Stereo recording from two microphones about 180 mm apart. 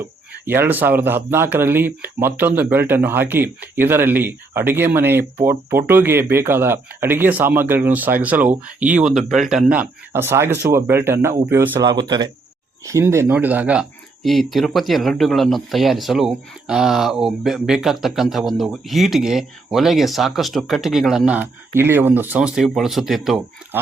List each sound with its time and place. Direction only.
0.0 s speech: 10° right (ahead or behind)